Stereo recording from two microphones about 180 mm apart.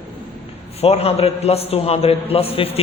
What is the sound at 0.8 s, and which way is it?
Speech, 35° left (ahead or behind).